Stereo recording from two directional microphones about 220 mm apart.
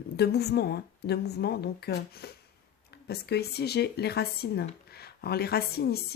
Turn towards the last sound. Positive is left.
turn(degrees=45)  # may be behind; listen again after turning